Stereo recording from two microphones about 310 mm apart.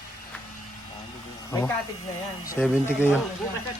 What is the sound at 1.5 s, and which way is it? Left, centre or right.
Speech, centre.